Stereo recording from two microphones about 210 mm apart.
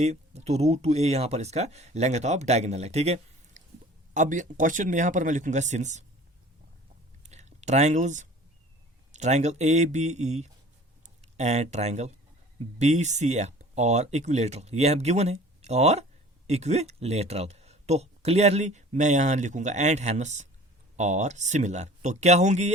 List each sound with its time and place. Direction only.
0.0 s speech: 30° right (ahead or behind)
7.2 s a sound: 30° right (ahead or behind)
9.1 s speech: 35° right (ahead or behind)